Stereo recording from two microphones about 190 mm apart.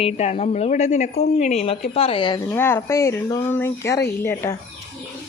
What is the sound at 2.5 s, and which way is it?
Speech, 10° left (ahead or behind).